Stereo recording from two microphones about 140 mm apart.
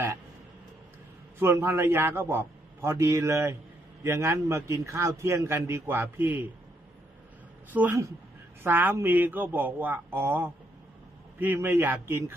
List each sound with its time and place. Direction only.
1.4 s a man's voice: 15° right (ahead or behind)
7.7 s a man's voice: 15° right (ahead or behind)